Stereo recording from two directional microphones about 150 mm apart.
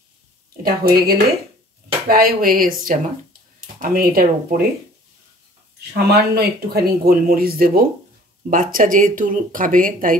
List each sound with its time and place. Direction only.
0.6 s speech: 85° right
6.0 s speech: 90° right
8.5 s speech: 65° right (ahead or behind)